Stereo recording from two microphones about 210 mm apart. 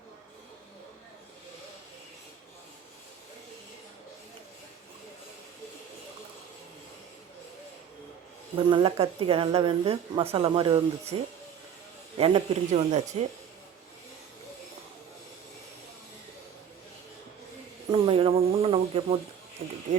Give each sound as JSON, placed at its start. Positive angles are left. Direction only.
{"t": 8.5, "sound": "a woman's voice", "side_deg": -25}
{"t": 17.9, "sound": "a woman's voice", "side_deg": -25}